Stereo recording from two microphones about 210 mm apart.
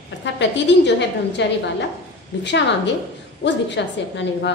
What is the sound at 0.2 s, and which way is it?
A woman's voice, 55° left (ahead or behind).